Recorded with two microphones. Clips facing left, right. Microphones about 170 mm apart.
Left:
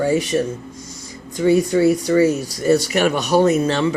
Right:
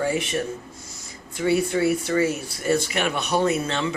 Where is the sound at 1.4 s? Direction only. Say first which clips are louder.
Left 6 dB; 35° left (ahead or behind).